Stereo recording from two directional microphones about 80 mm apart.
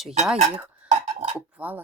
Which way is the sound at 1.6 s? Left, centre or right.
Right.